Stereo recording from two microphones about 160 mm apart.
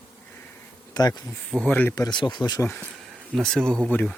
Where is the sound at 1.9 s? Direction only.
25° left (ahead or behind).